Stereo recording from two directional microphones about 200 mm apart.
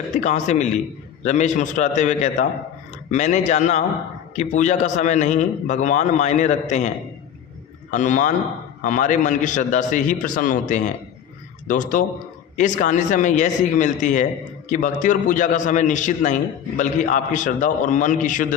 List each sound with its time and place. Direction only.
0.2 s a man's voice: 35° left (ahead or behind)